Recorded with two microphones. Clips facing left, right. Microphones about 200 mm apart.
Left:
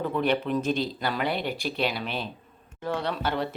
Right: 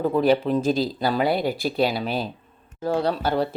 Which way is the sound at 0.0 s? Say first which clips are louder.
Right 6 dB; 35° right (ahead or behind).